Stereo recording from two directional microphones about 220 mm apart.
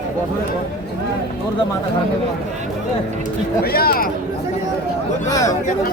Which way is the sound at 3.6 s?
45° left (ahead or behind).